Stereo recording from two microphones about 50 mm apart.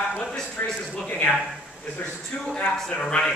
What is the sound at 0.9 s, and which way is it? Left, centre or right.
Speech, centre.